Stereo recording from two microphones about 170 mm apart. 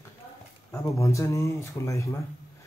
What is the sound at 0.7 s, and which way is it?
Speech, 15° left (ahead or behind).